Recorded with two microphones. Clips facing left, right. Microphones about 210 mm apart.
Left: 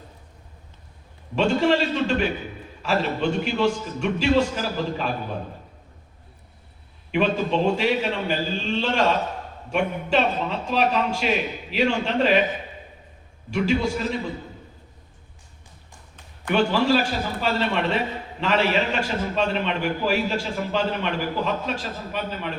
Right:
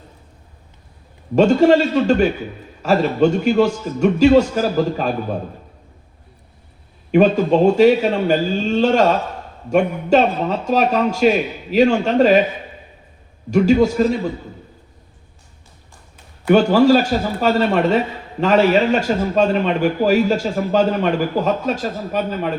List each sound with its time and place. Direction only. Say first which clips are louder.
1.4 s a man's voice: right 8 dB; 40° right (ahead or behind)
7.1 s a man's voice: right 9 dB; 40° right (ahead or behind)
13.5 s a man's voice: right 9 dB; 45° right (ahead or behind)
16.5 s a man's voice: right 8 dB; 40° right (ahead or behind)